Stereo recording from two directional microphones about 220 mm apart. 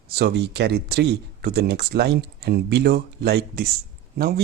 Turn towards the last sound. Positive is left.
turn(degrees=-45)  # may be behind; listen again after turning